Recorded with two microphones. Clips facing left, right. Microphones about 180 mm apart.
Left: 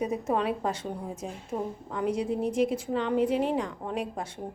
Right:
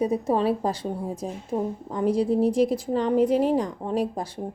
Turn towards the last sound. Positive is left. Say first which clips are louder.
# right 6 dB
turn(degrees=-35)  # may be behind; listen again after turning